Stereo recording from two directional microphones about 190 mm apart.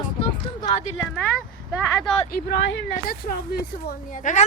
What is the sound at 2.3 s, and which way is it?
Speech, 55° left (ahead or behind).